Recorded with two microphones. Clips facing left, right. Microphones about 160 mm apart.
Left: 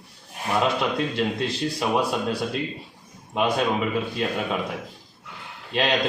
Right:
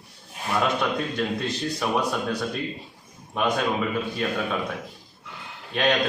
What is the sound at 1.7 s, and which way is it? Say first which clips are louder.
Speech: left 1 dB; 20° left (ahead or behind).